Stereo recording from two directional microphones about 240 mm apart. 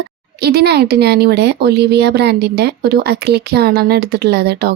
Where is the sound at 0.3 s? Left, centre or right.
Right.